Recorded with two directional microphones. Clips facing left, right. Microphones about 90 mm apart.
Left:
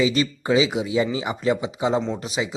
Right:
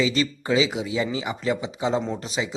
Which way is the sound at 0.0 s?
20° left (ahead or behind).